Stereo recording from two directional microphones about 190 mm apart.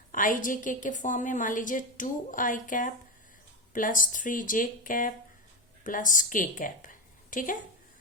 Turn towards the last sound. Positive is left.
turn(degrees=45)  # may be behind; listen again after turning